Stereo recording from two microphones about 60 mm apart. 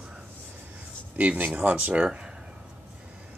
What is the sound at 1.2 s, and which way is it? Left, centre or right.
Speech, right.